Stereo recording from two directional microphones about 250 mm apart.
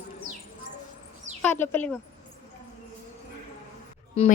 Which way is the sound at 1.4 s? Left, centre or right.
Centre.